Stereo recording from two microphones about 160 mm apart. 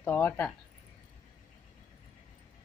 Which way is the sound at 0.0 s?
10° left (ahead or behind).